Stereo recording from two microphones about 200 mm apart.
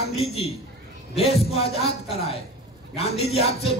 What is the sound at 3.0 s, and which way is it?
Speech, 30° left (ahead or behind).